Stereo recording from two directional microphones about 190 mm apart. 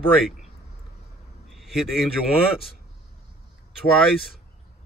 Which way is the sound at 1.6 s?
Centre (ahead or behind).